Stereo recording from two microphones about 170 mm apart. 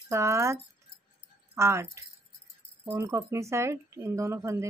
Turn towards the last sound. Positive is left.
turn(degrees=-20)  # may be behind; listen again after turning